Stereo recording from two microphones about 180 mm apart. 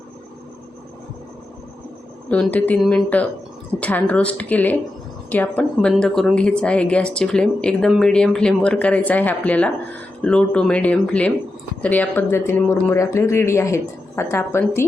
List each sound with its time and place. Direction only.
2.3 s a woman's voice: 10° left (ahead or behind)